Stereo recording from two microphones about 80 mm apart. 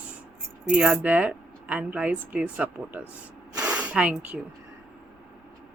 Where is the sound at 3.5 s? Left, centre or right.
Centre.